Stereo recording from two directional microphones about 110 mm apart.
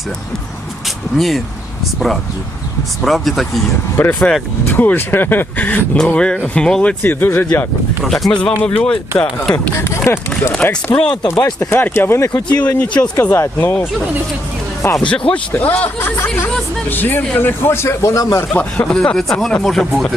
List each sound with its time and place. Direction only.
3.0 s speech: centre (ahead or behind)
7.0 s speech: 20° left (ahead or behind)
8.0 s speech: centre (ahead or behind)
10.1 s speech: 20° left (ahead or behind)
10.5 s speech: 10° left (ahead or behind)
11.3 s speech: 30° left (ahead or behind)
11.7 s speech: 20° left (ahead or behind)
14.9 s speech: 10° left (ahead or behind); by 18.4 s 30° left (ahead or behind)
18.5 s speech: 10° left (ahead or behind)